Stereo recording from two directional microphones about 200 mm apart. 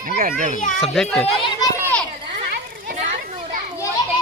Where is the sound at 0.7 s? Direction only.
5° left (ahead or behind).